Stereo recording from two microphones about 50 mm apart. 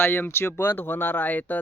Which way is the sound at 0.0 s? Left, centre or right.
Left.